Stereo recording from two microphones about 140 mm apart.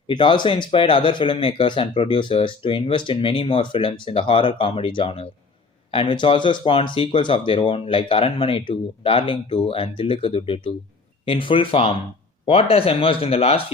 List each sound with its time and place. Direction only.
0.1 s speech: 35° left (ahead or behind)